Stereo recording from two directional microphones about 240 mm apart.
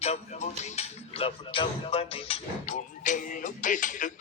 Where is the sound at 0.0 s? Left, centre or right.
Left.